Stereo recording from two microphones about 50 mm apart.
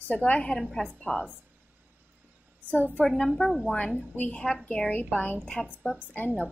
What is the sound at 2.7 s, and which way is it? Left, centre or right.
Speech, left.